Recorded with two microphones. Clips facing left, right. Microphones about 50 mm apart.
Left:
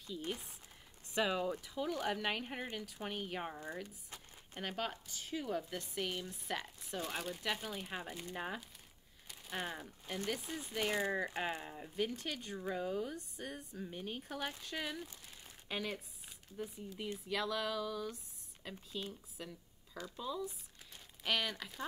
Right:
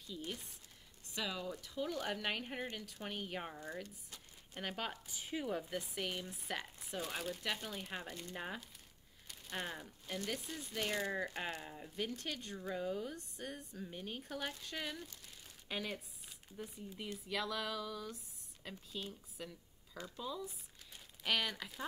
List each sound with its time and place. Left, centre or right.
1.1 s speech: left
1.6 s speech: centre
4.6 s speech: centre
6.5 s speech: centre
15.0 s crumpling: centre
16.5 s speech: centre